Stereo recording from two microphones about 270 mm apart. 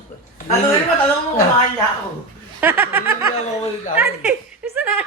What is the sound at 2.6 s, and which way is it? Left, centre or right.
Speech, centre.